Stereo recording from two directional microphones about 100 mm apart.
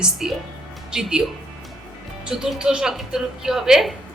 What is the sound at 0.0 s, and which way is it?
A woman's voice, 5° right (ahead or behind).